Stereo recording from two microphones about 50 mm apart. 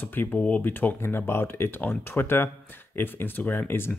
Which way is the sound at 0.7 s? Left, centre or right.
Left.